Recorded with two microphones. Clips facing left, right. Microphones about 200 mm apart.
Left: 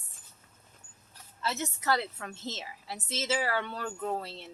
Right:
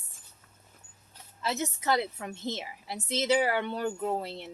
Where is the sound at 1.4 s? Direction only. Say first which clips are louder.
Right 2 dB; 15° right (ahead or behind).